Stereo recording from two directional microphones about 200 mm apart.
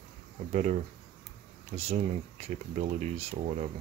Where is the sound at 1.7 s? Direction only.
35° right (ahead or behind).